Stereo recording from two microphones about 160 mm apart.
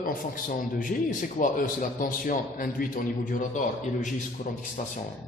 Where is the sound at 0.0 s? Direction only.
60° left (ahead or behind).